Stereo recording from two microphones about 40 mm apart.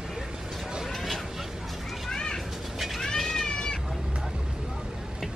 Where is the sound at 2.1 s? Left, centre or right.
Centre.